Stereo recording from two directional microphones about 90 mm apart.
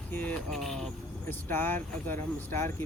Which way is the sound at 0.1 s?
20° left (ahead or behind).